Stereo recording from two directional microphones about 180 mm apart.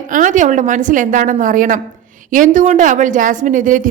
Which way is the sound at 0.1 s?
45° right (ahead or behind).